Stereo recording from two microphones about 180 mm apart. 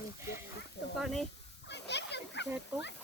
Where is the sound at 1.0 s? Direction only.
Centre (ahead or behind).